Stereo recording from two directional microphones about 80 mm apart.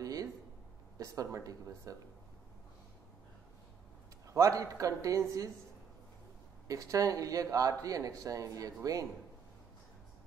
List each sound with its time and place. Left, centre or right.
0.0 s a sound: right
0.9 s speech: right
4.3 s speech: right
6.7 s speech: right